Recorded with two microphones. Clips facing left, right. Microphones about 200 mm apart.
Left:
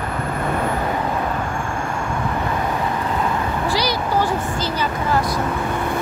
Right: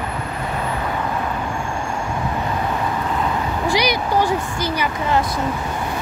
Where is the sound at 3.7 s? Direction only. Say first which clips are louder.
Right 3 dB; 15° right (ahead or behind).